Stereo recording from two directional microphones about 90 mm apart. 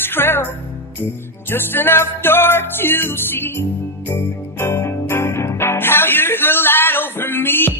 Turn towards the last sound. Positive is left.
turn(degrees=25)  # may be behind; listen again after turning